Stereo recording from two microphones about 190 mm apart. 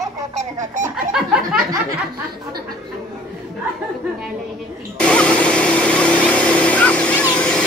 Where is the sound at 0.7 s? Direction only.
40° right (ahead or behind).